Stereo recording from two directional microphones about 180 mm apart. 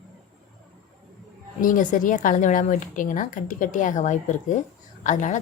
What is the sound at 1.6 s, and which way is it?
A woman's voice, 50° left (ahead or behind).